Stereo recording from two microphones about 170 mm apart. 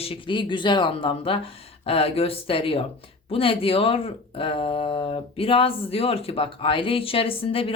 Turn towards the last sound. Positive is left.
turn(degrees=35)  # may be behind; listen again after turning